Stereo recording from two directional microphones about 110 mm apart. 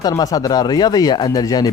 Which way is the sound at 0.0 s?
35° left (ahead or behind).